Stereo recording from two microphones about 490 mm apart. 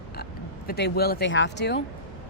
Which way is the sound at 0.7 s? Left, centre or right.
Centre.